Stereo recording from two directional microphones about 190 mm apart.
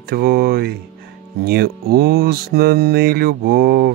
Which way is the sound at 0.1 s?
55° right (ahead or behind).